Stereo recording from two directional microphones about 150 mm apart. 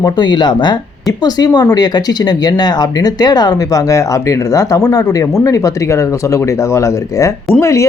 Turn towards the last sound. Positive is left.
turn(degrees=20)  # may be behind; listen again after turning